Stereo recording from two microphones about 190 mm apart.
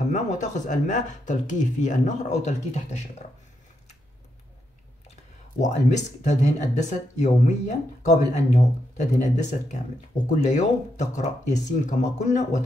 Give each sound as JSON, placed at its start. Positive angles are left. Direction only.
{"t": 0.1, "sound": "speech", "side_deg": 40}
{"t": 5.6, "sound": "speech", "side_deg": 40}